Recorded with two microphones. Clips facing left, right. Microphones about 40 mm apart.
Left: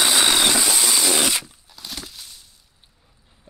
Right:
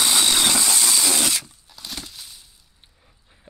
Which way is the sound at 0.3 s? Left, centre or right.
Centre.